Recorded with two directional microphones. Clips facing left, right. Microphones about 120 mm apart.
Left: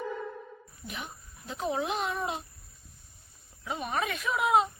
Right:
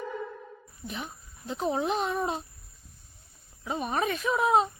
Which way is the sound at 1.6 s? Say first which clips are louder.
Right 3 dB; 30° right (ahead or behind).